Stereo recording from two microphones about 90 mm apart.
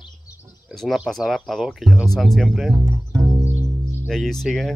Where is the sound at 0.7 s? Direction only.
5° left (ahead or behind).